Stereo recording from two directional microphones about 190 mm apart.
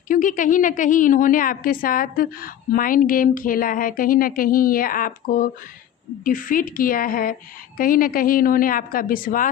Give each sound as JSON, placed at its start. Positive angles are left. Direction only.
{"t": 0.1, "sound": "a woman's voice", "side_deg": 45}